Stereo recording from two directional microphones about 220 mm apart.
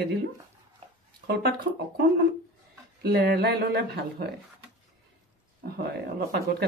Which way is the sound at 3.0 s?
45° right (ahead or behind).